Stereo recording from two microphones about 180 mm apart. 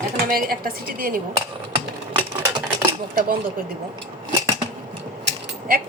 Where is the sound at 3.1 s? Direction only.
55° right (ahead or behind).